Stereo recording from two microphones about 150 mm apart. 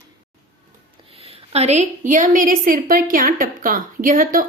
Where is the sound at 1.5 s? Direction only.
50° right (ahead or behind).